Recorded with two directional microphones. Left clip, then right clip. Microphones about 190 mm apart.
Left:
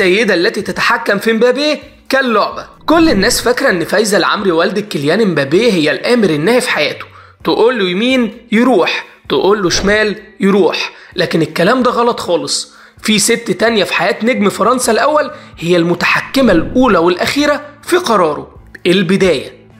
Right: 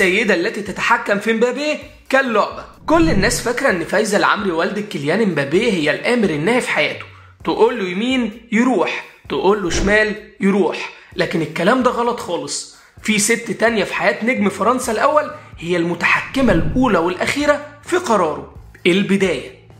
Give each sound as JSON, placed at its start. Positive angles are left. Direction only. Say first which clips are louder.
{"t": 0.0, "sound": "speech", "louder": "left 5 dB", "side_deg": 30}